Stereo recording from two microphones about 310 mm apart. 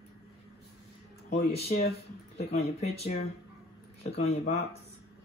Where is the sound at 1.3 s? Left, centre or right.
Left.